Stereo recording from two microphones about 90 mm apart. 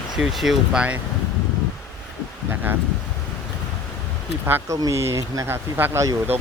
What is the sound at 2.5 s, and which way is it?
Speech, 25° right (ahead or behind).